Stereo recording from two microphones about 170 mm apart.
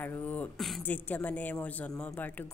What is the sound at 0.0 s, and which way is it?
A woman's voice, 10° left (ahead or behind).